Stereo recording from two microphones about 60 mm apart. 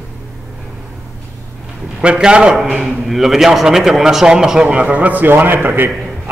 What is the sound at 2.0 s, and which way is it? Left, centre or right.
A man's voice, centre.